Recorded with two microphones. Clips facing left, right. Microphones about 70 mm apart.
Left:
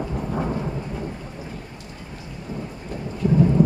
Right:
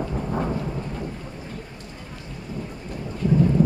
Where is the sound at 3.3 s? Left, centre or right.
Centre.